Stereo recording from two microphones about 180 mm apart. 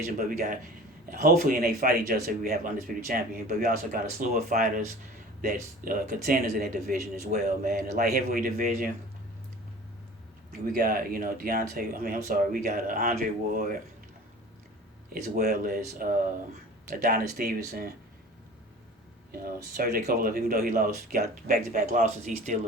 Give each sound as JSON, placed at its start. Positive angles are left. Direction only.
{"t": 0.2, "sound": "speech", "side_deg": -50}
{"t": 7.7, "sound": "speech", "side_deg": -55}
{"t": 10.7, "sound": "speech", "side_deg": -50}
{"t": 15.4, "sound": "speech", "side_deg": -55}
{"t": 19.7, "sound": "speech", "side_deg": -55}